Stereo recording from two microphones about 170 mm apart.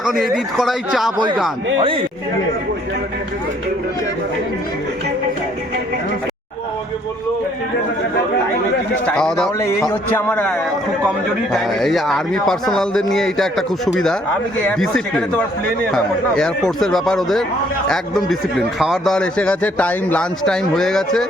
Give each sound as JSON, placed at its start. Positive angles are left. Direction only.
{"t": 0.0, "sound": "a man's voice", "side_deg": 0}
{"t": 1.8, "sound": "speech", "side_deg": -30}
{"t": 9.0, "sound": "a man's voice", "side_deg": 5}